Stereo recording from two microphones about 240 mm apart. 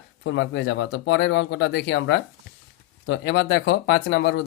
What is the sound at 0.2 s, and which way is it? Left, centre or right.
Speech, left.